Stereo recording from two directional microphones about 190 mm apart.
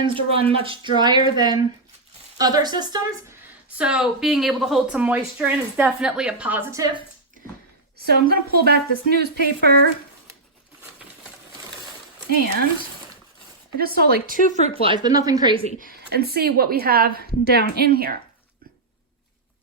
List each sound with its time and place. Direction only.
0.0 s a woman's voice: 25° right (ahead or behind)
3.8 s speech: 5° right (ahead or behind)
7.9 s a woman's voice: 55° right (ahead or behind)
13.7 s speech: 55° right (ahead or behind)
14.3 s speech: 45° left (ahead or behind)
14.6 s a woman's voice: 30° right (ahead or behind)
16.0 s a woman's voice: 55° right (ahead or behind)